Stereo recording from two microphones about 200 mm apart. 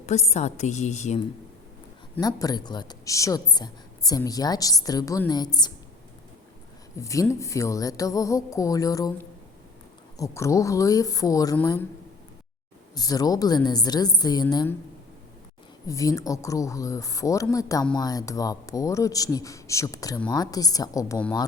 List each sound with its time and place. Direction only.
0.0 s a woman's voice: 35° left (ahead or behind)
2.1 s a woman's voice: 20° left (ahead or behind)
6.9 s speech: 15° left (ahead or behind)
12.9 s a woman's voice: 20° left (ahead or behind)
15.9 s a woman's voice: 15° left (ahead or behind)